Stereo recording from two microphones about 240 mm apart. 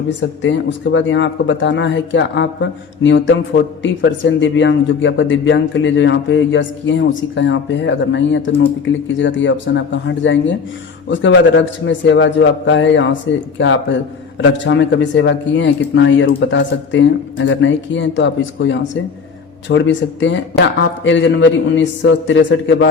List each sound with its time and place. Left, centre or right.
0.2 s speech: left